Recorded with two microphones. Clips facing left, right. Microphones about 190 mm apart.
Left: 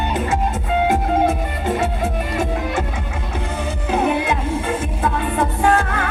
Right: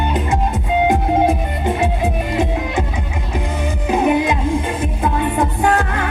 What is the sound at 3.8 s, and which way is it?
Music, 15° right (ahead or behind).